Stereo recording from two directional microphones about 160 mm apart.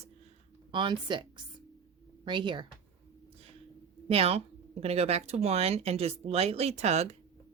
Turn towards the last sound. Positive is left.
turn(degrees=-40)  # may be behind; listen again after turning